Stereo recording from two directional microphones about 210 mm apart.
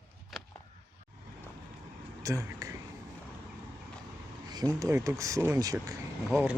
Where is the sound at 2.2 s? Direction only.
15° right (ahead or behind).